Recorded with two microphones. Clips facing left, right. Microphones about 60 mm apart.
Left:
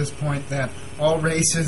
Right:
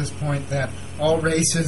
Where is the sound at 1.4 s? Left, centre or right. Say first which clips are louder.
Right 1 dB; centre.